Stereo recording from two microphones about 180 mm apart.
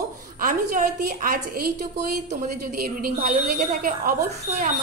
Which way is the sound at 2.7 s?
55° right (ahead or behind).